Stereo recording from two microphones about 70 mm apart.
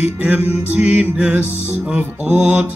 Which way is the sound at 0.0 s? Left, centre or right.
Centre.